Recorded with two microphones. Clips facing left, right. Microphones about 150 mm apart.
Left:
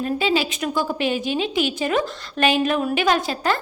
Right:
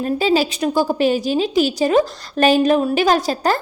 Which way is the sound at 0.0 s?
40° right (ahead or behind).